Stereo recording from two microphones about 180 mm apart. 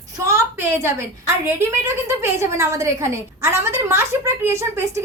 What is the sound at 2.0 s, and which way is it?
A woman's voice, 15° right (ahead or behind).